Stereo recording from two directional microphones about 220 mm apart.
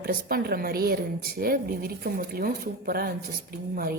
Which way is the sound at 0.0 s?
45° right (ahead or behind).